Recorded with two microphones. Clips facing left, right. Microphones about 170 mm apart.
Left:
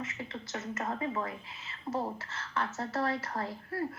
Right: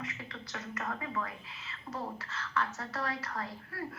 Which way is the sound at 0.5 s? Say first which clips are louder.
Left 3 dB; 25° left (ahead or behind).